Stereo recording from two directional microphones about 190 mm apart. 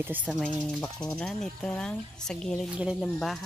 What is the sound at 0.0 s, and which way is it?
Speech, 10° right (ahead or behind).